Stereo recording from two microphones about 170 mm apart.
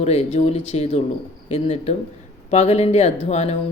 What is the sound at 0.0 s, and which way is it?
Speech, 40° left (ahead or behind).